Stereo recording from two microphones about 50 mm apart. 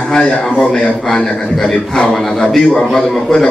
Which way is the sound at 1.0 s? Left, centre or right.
Centre.